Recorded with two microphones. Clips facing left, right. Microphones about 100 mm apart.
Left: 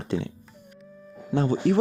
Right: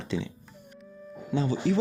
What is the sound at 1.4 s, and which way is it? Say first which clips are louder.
Speech: left 4 dB; 55° left (ahead or behind).